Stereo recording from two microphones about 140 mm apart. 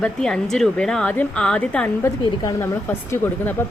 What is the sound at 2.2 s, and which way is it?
Speech, 30° left (ahead or behind).